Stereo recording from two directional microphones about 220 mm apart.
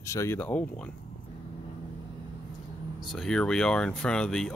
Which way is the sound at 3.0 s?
Centre (ahead or behind).